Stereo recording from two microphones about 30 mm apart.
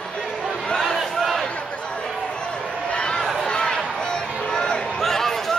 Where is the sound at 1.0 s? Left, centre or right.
Centre.